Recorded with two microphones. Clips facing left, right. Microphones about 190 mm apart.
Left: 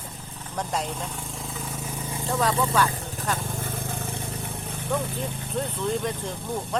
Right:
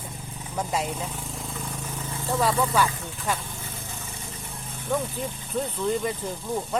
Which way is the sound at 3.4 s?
50° left (ahead or behind).